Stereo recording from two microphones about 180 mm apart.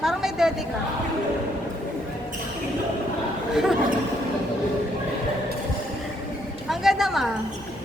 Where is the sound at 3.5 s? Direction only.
Centre (ahead or behind).